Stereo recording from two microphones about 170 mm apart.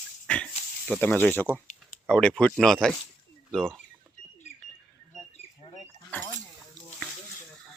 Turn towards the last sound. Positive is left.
turn(degrees=10)  # may be behind; listen again after turning